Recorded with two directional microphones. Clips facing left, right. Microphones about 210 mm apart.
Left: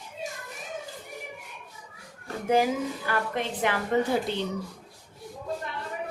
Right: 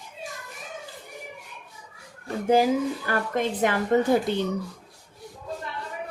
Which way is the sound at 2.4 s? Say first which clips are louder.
Right 3 dB; 35° right (ahead or behind).